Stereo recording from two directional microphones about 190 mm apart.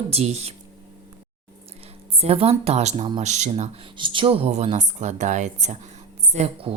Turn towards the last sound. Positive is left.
turn(degrees=-35)  # may be behind; listen again after turning